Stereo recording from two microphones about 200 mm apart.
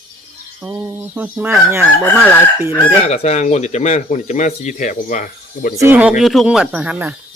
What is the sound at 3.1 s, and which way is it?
Speech, 35° left (ahead or behind).